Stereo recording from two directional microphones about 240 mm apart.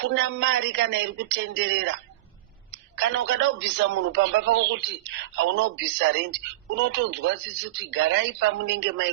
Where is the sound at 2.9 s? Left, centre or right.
Right.